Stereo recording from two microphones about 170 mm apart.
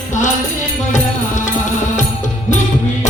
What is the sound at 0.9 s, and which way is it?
Music, 45° left (ahead or behind).